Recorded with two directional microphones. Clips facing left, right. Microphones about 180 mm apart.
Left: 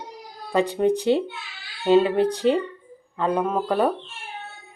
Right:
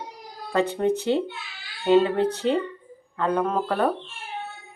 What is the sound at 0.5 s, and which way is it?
Speech, 15° left (ahead or behind).